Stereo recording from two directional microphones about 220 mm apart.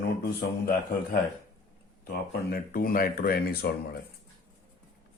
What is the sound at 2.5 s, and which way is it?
Speech, 40° left (ahead or behind).